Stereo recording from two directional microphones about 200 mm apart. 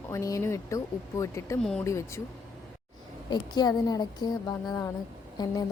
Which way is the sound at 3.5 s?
20° left (ahead or behind).